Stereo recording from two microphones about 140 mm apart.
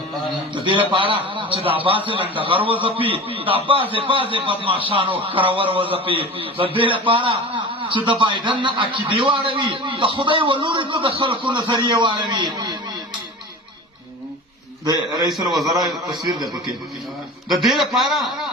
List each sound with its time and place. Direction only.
0.5 s a man's voice: 35° right (ahead or behind)
15.6 s a man's voice: 25° right (ahead or behind)
17.5 s a man's voice: centre (ahead or behind)